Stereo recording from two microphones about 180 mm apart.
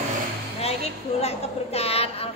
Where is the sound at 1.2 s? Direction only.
35° left (ahead or behind).